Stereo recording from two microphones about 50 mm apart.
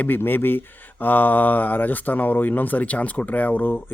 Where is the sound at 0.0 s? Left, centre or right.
Left.